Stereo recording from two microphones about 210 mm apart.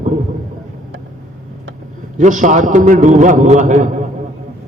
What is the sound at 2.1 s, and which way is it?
A man's voice, 35° right (ahead or behind).